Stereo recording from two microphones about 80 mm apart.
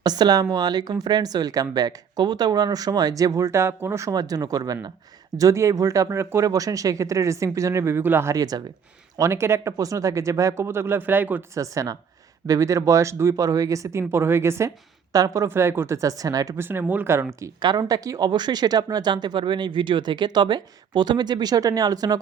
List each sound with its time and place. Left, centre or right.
0.0 s speech: right
4.1 s speech: right
8.3 s speech: right
9.1 s speech: right
11.5 s speech: right
15.1 s speech: right
15.4 s speech: right
16.0 s speech: right
16.6 s speech: right
17.1 s speech: right
17.6 s speech: right
18.3 s speech: right
19.1 s speech: right